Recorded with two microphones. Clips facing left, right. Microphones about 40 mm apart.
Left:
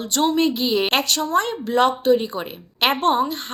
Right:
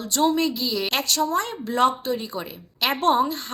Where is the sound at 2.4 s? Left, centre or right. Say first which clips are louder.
Left 5 dB; left.